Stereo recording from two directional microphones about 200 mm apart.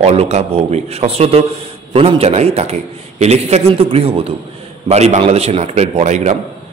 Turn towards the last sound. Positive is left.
turn(degrees=-35)  # may be behind; listen again after turning